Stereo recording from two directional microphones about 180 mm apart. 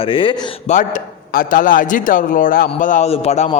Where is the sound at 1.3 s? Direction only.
50° left (ahead or behind).